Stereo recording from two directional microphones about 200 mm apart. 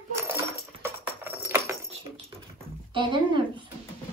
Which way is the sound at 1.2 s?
10° right (ahead or behind).